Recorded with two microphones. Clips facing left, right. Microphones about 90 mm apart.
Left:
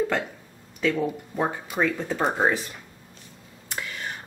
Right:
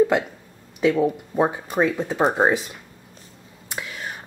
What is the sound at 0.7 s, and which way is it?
Speech, 15° right (ahead or behind).